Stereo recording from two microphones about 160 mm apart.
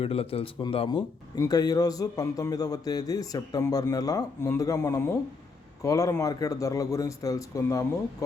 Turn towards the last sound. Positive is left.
turn(degrees=20)  # may be behind; listen again after turning